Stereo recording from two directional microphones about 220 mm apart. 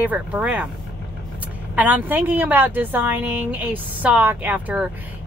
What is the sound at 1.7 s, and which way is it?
Speech, 10° right (ahead or behind).